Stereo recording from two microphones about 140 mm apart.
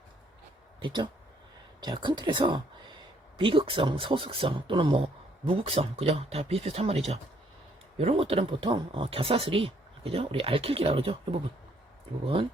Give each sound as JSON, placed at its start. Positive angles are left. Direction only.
{"t": 0.8, "sound": "speech", "side_deg": -35}